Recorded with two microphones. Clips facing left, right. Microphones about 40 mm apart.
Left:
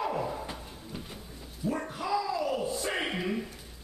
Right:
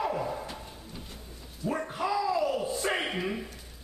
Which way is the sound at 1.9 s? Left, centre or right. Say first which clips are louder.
Right 4 dB; centre.